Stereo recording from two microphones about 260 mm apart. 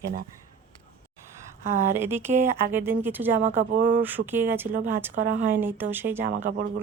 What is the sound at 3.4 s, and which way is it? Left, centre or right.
Speech, right.